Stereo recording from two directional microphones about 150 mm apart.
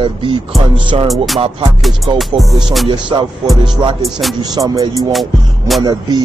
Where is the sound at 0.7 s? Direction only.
30° right (ahead or behind).